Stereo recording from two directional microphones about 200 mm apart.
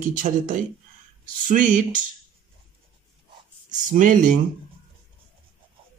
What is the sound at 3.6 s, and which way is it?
Speech, 40° right (ahead or behind).